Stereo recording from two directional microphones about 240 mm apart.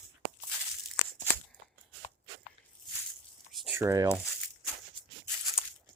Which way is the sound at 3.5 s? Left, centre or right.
Centre.